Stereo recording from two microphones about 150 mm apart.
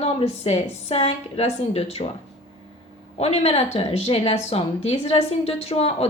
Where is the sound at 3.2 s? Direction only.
45° left (ahead or behind).